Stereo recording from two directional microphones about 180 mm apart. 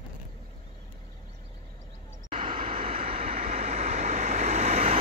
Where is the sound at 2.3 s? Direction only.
30° right (ahead or behind).